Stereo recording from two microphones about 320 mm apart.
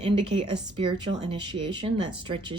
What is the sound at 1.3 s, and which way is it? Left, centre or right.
Speech, centre.